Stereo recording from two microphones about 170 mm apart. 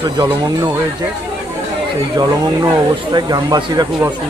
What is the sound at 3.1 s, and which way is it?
Speech, 25° right (ahead or behind).